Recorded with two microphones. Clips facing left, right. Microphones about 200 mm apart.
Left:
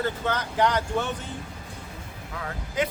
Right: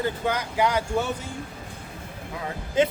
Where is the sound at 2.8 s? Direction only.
25° right (ahead or behind).